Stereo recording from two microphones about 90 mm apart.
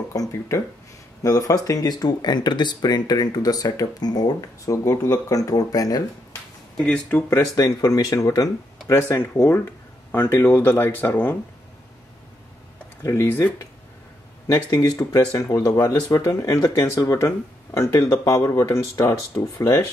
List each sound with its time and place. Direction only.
0.1 s speech: 40° left (ahead or behind)
6.9 s speech: 15° left (ahead or behind)
7.2 s speech: 40° left (ahead or behind); by 11.3 s 25° left (ahead or behind)
13.0 s speech: 35° left (ahead or behind)
14.5 s speech: 40° left (ahead or behind)